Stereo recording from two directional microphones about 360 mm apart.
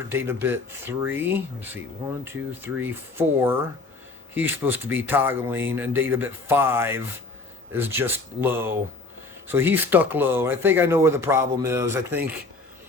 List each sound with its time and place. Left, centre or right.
0.1 s speech: centre